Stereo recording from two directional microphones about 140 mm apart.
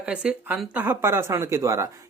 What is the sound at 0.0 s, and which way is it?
Speech, 10° right (ahead or behind).